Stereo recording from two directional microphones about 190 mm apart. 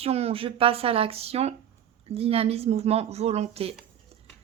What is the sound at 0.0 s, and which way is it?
A woman's voice, 30° right (ahead or behind).